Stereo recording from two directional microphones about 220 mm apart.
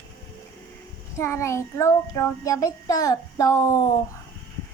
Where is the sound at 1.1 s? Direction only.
10° left (ahead or behind).